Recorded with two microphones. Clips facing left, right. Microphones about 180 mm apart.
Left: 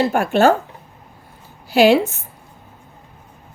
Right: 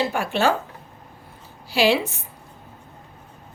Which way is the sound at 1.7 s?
50° left (ahead or behind).